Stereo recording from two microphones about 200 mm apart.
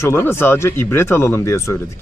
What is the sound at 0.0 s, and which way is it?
Speech, 10° left (ahead or behind).